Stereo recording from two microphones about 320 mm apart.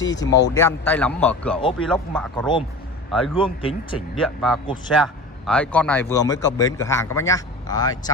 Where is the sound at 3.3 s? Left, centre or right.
Centre.